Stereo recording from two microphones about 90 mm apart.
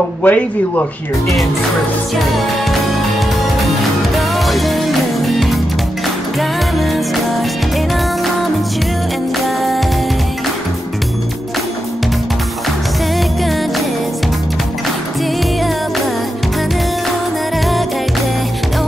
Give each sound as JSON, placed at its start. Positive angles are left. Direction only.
{"t": 0.2, "sound": "speech", "side_deg": 20}
{"t": 2.3, "sound": "music", "side_deg": 0}